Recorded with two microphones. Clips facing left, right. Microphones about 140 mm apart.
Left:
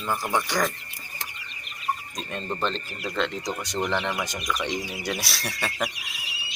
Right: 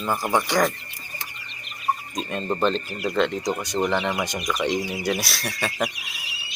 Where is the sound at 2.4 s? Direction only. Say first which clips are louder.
Right 5 dB; 40° right (ahead or behind).